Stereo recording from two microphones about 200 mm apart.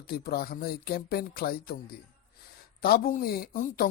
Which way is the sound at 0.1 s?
50° left (ahead or behind).